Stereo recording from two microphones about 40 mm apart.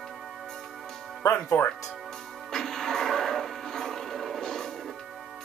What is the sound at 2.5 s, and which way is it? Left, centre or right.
Music, centre.